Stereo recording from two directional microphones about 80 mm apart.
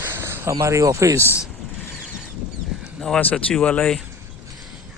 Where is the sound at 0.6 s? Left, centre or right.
Right.